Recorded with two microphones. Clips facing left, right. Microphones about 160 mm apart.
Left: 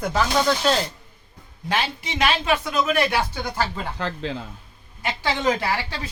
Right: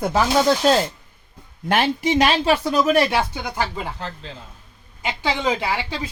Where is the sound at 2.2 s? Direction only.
35° right (ahead or behind).